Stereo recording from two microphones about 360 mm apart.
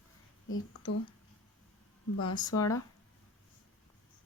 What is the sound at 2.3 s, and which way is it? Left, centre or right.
Speech, centre.